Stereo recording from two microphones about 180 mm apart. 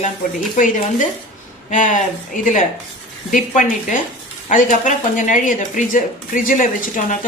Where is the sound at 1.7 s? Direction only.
45° left (ahead or behind).